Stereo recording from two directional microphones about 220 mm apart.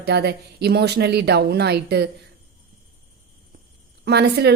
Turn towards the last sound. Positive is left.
turn(degrees=-50)  # may be behind; listen again after turning